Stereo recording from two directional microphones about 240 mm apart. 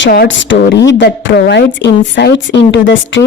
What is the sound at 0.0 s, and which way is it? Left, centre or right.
A woman's voice, left.